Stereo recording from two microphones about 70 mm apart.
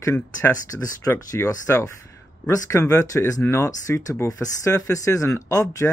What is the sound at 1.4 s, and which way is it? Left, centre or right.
Speech, left.